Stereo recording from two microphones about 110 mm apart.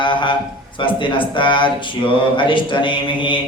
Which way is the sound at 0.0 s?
45° left (ahead or behind).